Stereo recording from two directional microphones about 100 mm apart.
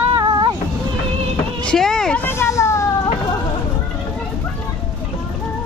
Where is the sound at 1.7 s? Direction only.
5° left (ahead or behind).